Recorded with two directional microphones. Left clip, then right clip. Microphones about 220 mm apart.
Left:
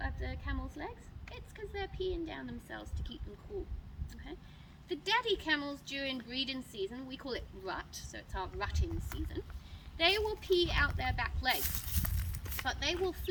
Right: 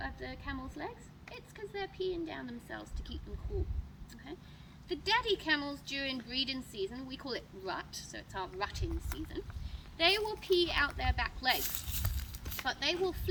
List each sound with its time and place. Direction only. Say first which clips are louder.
0.0 s a woman's voice: right 1 dB; centre (ahead or behind)
4.9 s speech: right 1 dB; centre (ahead or behind)
11.9 s a sound: even; 30° right (ahead or behind)
12.6 s speech: right 1 dB; 5° left (ahead or behind)